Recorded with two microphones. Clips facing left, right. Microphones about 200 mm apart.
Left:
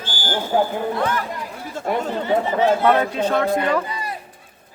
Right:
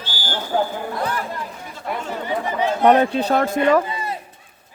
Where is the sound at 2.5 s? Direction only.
15° right (ahead or behind).